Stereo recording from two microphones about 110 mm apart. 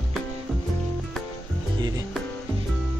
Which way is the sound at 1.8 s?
35° right (ahead or behind).